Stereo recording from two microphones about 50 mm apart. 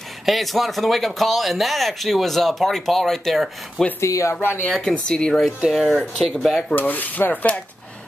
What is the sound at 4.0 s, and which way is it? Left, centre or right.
Speech, left.